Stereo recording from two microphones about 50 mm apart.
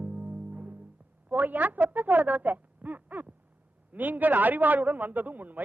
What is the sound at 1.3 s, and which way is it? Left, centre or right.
A man's voice, right.